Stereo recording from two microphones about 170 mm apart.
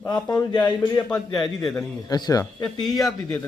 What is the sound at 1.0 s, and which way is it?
Speech, 5° left (ahead or behind).